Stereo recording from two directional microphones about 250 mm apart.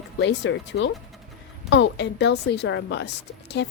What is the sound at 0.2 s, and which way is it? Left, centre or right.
A woman's voice, left.